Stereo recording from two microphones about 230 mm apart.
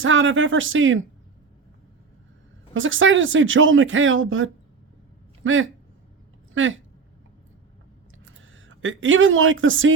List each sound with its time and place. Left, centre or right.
0.0 s speech: right
2.7 s speech: right
8.2 s speech: right